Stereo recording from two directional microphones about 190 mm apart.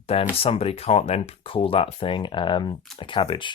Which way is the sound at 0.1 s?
30° left (ahead or behind).